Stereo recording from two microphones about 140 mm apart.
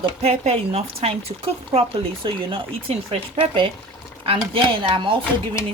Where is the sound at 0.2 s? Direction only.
50° right (ahead or behind).